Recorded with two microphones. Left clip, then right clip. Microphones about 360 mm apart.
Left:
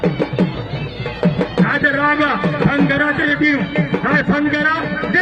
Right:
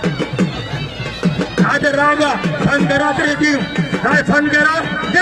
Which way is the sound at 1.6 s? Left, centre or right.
Right.